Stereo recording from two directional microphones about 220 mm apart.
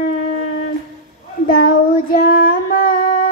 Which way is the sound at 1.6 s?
40° left (ahead or behind).